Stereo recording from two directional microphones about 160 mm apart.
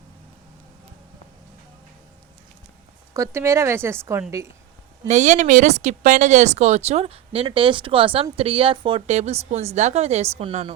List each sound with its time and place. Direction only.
3.2 s a woman's voice: 15° right (ahead or behind)
5.0 s speech: 45° right (ahead or behind)